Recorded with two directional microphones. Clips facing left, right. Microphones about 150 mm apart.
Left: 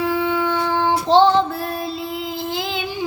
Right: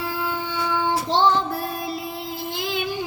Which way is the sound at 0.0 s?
65° left (ahead or behind).